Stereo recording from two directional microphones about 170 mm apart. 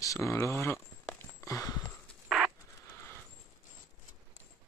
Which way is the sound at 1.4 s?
20° left (ahead or behind).